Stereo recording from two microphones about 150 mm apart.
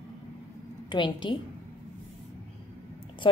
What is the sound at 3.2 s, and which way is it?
Speech, 35° left (ahead or behind).